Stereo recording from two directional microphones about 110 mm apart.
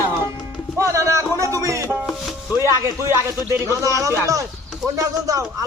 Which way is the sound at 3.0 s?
20° right (ahead or behind).